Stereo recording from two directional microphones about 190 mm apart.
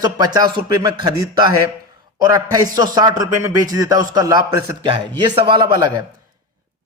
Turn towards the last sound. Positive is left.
turn(degrees=-20)  # may be behind; listen again after turning